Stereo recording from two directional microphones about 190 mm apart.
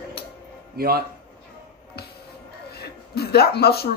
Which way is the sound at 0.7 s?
55° right (ahead or behind).